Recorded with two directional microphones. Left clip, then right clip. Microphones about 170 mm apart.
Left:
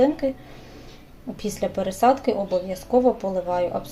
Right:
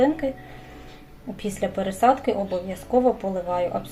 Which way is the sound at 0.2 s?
15° left (ahead or behind).